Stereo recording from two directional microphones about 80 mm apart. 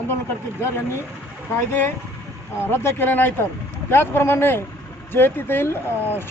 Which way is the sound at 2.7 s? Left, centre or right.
Left.